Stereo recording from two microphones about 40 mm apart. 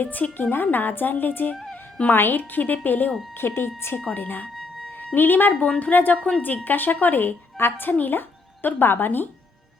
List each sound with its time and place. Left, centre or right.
0.0 s speech: left
1.7 s music: left
2.1 s speech: left
2.4 s speech: left
3.3 s speech: left
4.1 s speech: left
4.5 s music: centre
4.9 s speech: left
5.5 s speech: left
5.8 s speech: left
6.1 s speech: left
6.7 s speech: left
7.9 s speech: left
8.6 s speech: left